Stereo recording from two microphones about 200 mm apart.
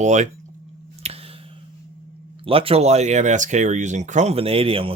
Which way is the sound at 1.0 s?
30° right (ahead or behind).